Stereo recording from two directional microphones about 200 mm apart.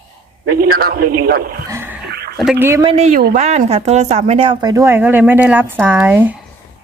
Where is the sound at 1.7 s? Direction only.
10° right (ahead or behind).